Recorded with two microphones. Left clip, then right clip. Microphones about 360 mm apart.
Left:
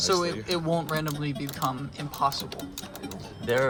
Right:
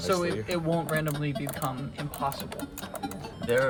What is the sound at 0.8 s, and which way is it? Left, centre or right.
Speech, centre.